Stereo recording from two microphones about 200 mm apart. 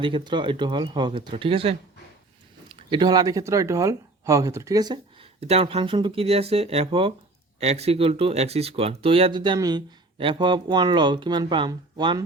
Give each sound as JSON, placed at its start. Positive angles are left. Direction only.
{"t": 0.0, "sound": "speech", "side_deg": -25}
{"t": 5.4, "sound": "speech", "side_deg": -30}